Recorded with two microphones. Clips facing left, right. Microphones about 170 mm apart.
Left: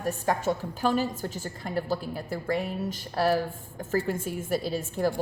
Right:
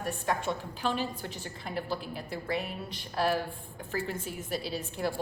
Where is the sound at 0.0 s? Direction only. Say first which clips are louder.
Left 5 dB; 40° left (ahead or behind).